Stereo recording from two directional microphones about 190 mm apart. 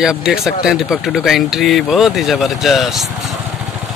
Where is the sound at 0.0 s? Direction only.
5° right (ahead or behind).